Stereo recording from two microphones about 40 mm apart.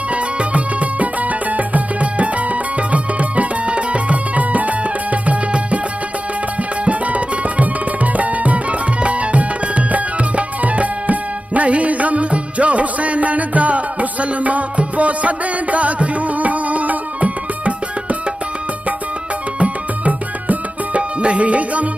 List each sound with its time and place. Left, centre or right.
0.1 s music: right
6.8 s music: right
19.6 s music: right